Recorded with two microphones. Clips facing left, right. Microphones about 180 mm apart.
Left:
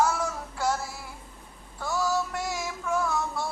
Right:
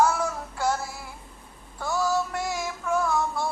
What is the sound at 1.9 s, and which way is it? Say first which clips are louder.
Music: right 2 dB; 55° right (ahead or behind).